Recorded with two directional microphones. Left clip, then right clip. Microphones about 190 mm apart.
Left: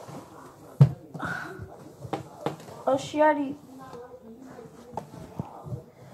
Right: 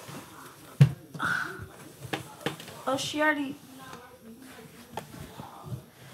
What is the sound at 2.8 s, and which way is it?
Speech, 30° right (ahead or behind).